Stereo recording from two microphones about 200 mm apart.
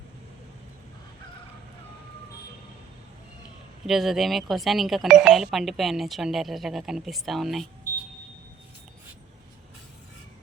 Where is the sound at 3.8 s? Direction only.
Centre (ahead or behind).